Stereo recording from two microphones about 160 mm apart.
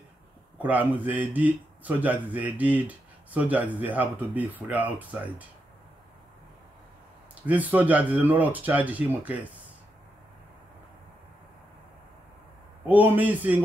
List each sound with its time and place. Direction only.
0.6 s speech: 10° right (ahead or behind)
7.4 s speech: 10° right (ahead or behind)
12.8 s speech: 10° right (ahead or behind)